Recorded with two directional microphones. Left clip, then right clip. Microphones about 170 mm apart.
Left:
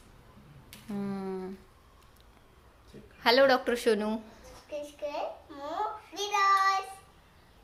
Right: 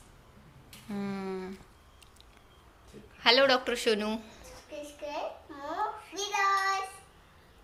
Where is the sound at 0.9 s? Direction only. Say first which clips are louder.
Even; 15° left (ahead or behind).